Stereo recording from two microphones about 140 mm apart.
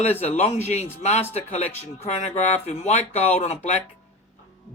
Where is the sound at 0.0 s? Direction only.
50° left (ahead or behind).